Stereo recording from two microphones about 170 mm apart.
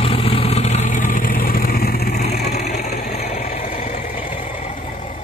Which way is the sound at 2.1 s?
40° left (ahead or behind).